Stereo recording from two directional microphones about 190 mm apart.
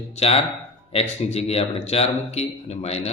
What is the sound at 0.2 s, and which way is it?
A man's voice, 30° left (ahead or behind).